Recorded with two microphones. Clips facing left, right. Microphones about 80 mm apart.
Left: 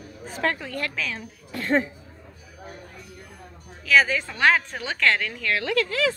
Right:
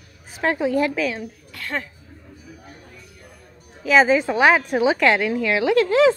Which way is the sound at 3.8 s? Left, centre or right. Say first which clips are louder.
Right 5 dB; right.